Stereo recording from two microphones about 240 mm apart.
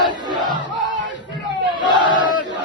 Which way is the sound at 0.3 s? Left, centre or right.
Centre.